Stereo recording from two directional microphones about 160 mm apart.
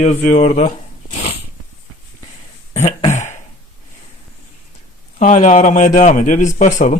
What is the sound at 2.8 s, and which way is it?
Throat clearing, 45° left (ahead or behind).